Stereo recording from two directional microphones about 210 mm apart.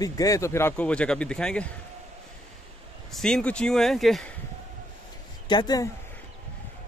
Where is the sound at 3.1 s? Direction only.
5° left (ahead or behind).